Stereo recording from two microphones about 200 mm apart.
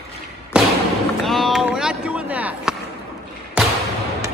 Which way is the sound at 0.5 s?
5° right (ahead or behind).